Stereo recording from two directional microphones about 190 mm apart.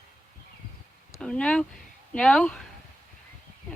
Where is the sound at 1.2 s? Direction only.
5° left (ahead or behind).